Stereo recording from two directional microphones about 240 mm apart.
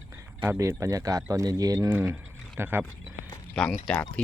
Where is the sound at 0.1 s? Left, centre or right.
Centre.